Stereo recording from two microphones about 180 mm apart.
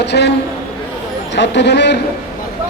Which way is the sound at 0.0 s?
70° left (ahead or behind).